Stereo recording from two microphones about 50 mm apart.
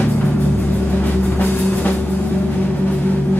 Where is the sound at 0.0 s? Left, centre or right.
Left.